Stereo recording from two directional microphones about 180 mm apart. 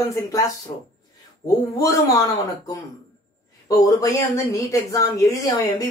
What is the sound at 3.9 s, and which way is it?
Speech, 20° left (ahead or behind).